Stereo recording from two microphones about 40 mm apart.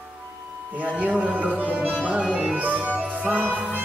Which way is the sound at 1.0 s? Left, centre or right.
Right.